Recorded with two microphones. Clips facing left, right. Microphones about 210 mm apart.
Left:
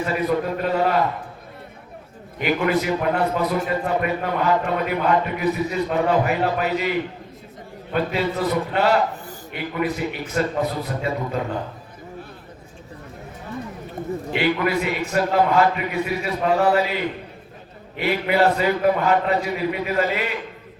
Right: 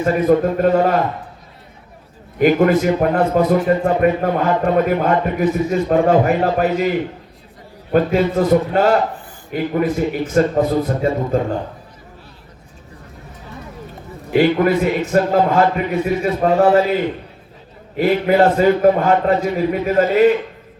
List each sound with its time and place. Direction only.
0.0 s a man's voice: 45° right (ahead or behind)
2.4 s a man's voice: 45° right (ahead or behind)
7.9 s a man's voice: 45° right (ahead or behind)
14.3 s a man's voice: 45° right (ahead or behind)
17.9 s a man's voice: 45° right (ahead or behind)